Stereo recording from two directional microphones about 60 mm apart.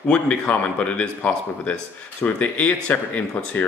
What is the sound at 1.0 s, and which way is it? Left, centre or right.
Speech, left.